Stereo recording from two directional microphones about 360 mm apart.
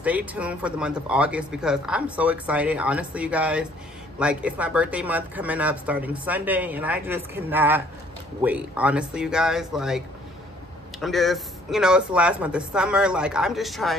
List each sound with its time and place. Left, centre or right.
0.0 s speech: centre